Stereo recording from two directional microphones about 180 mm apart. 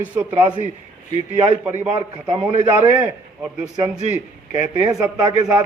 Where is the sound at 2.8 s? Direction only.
10° right (ahead or behind).